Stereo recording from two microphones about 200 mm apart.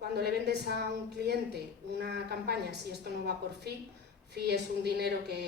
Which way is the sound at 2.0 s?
55° right (ahead or behind).